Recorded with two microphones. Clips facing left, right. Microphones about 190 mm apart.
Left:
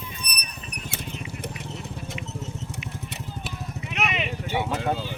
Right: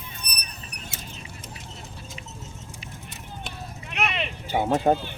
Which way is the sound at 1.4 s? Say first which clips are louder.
Left 7 dB; 65° left (ahead or behind).